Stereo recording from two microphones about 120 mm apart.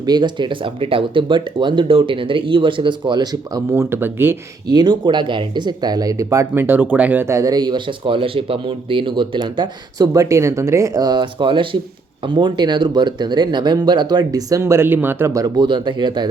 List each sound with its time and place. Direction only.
0.0 s speech: 35° right (ahead or behind)
3.7 s speech: 20° right (ahead or behind)
4.7 s speech: 35° right (ahead or behind); by 7.3 s 15° right (ahead or behind)
7.3 s speech: 35° right (ahead or behind)